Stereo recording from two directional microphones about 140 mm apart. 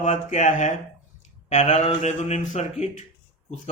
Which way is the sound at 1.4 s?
50° left (ahead or behind).